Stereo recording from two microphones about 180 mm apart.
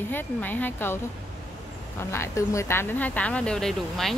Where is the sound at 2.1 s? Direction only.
15° left (ahead or behind).